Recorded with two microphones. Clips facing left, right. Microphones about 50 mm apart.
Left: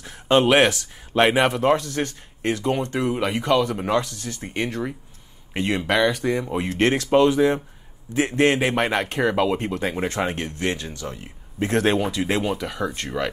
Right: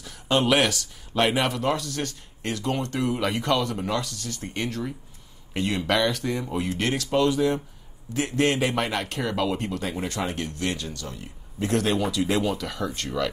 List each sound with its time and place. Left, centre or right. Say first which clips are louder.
0.0 s speech: left 5 dB; left
3.8 s speech: left 5 dB; left
6.7 s a man's voice: left 8 dB; left